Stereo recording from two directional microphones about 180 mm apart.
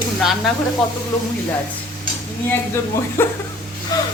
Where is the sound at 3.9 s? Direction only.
20° left (ahead or behind).